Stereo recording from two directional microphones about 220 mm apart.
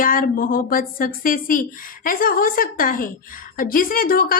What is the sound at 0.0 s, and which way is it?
A woman's voice, 40° left (ahead or behind).